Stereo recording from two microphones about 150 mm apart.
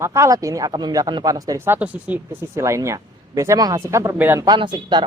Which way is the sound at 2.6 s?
20° right (ahead or behind).